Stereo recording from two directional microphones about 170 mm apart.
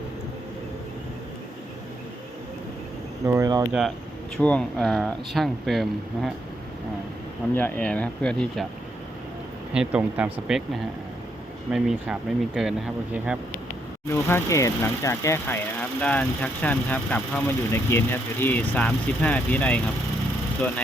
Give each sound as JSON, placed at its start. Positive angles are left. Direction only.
{"t": 3.2, "sound": "speech", "side_deg": -20}
{"t": 3.7, "sound": "speech", "side_deg": 0}
{"t": 7.5, "sound": "speech", "side_deg": 10}
{"t": 9.7, "sound": "speech", "side_deg": -5}
{"t": 11.7, "sound": "speech", "side_deg": -5}
{"t": 14.1, "sound": "speech", "side_deg": 15}